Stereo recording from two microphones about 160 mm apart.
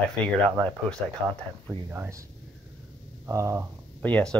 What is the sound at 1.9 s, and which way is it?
Speech, 20° right (ahead or behind).